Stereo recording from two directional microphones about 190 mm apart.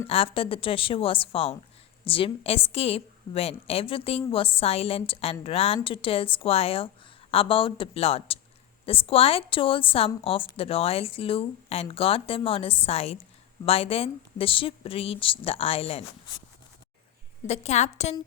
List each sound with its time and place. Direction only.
0.1 s a woman's voice: 30° left (ahead or behind)
17.4 s a woman's voice: 35° left (ahead or behind)